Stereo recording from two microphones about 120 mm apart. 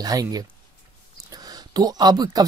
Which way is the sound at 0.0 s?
30° right (ahead or behind).